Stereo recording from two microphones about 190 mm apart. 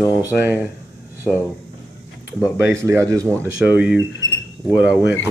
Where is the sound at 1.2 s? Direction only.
10° left (ahead or behind).